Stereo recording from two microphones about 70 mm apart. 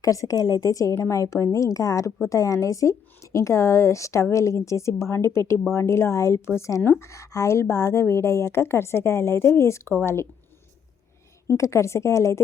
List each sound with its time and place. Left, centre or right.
0.0 s a woman's voice: left
11.4 s a woman's voice: left